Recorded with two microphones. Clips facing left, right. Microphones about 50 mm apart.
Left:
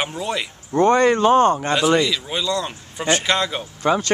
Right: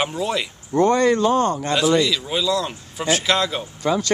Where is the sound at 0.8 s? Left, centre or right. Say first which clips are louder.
Left 2 dB; left.